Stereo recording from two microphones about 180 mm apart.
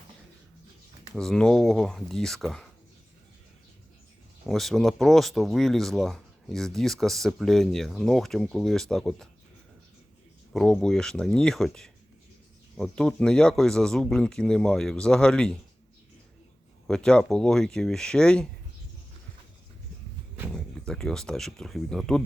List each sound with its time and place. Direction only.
1.1 s speech: 5° left (ahead or behind)
4.4 s speech: centre (ahead or behind)
10.5 s speech: centre (ahead or behind)
16.8 s speech: 5° left (ahead or behind)
20.5 s speech: 5° left (ahead or behind)